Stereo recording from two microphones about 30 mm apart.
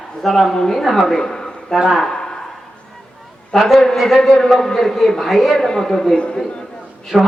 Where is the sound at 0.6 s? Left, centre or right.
Centre.